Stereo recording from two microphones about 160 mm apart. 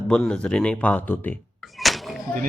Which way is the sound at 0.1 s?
5° left (ahead or behind).